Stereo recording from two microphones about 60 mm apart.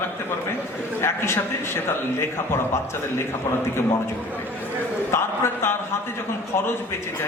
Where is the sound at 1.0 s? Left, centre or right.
Left.